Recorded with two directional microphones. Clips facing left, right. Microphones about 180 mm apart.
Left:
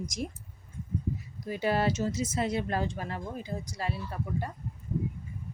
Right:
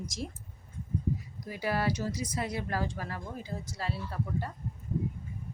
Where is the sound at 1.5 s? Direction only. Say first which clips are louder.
Left 3 dB; 25° left (ahead or behind).